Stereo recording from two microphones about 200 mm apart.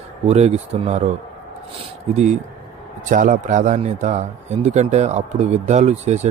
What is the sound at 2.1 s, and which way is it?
A man's voice, 35° right (ahead or behind).